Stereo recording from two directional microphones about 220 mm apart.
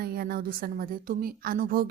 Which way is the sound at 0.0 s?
45° right (ahead or behind).